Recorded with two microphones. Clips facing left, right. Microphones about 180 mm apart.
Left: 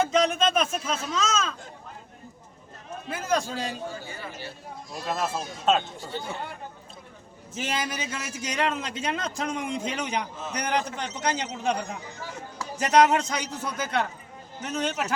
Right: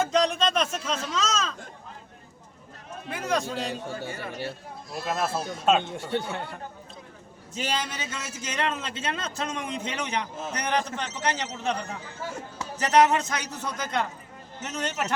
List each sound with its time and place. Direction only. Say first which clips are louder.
0.0 s speech: left 1 dB; centre (ahead or behind)
3.1 s speech: left 1 dB; centre (ahead or behind)
4.0 s speech: right 5 dB; 65° right (ahead or behind)
4.9 s speech: right 1 dB; 5° right (ahead or behind)
5.9 s speech: right 5 dB; 70° right (ahead or behind)
7.5 s a man's voice: even; 5° left (ahead or behind)